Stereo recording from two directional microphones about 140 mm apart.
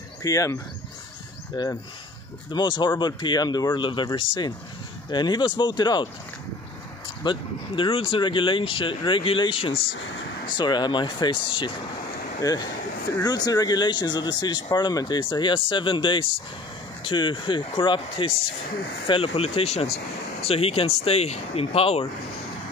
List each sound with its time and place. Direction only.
0.2 s speech: 25° left (ahead or behind)
7.2 s speech: 35° left (ahead or behind)